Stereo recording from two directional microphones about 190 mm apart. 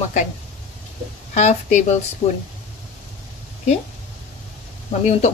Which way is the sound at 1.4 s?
40° left (ahead or behind).